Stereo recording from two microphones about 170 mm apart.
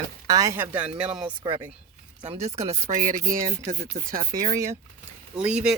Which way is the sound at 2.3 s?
40° right (ahead or behind).